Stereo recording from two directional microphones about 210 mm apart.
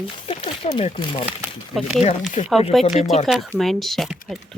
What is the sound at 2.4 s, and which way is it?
Speech, 35° left (ahead or behind).